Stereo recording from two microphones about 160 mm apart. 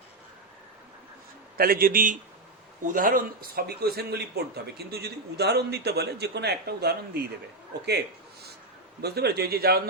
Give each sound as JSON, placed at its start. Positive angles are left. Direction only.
{"t": 1.5, "sound": "a man's voice", "side_deg": -65}
{"t": 7.7, "sound": "a man's voice", "side_deg": -90}